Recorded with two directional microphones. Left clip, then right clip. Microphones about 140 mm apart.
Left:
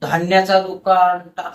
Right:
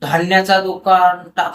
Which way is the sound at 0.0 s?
15° right (ahead or behind).